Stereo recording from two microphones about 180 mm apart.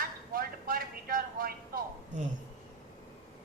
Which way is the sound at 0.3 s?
55° right (ahead or behind).